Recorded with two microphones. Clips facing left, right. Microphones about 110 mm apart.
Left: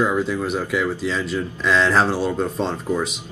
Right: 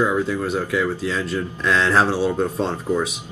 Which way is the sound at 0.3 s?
5° left (ahead or behind).